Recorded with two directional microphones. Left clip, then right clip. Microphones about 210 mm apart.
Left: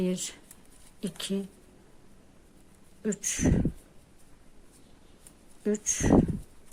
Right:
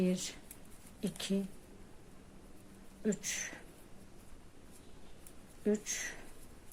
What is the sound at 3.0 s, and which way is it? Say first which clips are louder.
Speech: left 7 dB; 25° left (ahead or behind).